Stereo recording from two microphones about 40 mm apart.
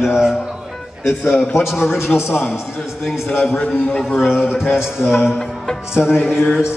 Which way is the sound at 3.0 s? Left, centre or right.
Centre.